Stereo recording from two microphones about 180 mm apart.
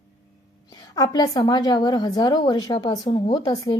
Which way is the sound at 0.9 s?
20° left (ahead or behind).